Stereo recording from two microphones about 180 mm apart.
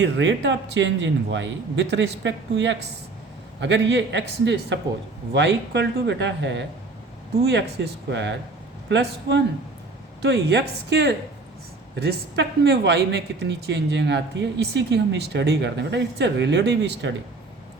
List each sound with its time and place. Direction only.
0.0 s a man's voice: 90° right
7.8 s speech: 75° right (ahead or behind)